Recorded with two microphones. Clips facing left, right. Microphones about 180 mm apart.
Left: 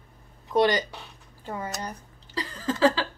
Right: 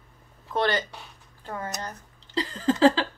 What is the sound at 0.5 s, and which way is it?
Speech, 10° left (ahead or behind).